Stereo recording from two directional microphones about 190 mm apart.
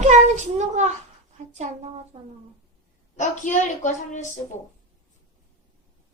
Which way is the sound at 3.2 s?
40° left (ahead or behind).